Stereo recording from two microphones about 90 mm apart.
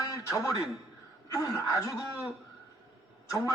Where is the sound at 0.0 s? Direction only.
40° left (ahead or behind).